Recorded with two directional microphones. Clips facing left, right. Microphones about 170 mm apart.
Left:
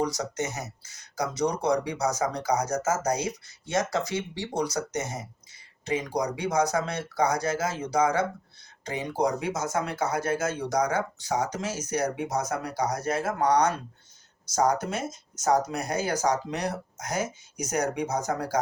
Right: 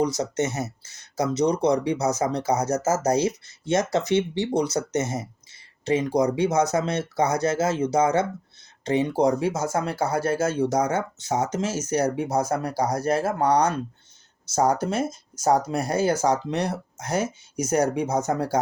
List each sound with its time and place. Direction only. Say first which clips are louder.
0.0 s speech: right 5 dB; 25° right (ahead or behind)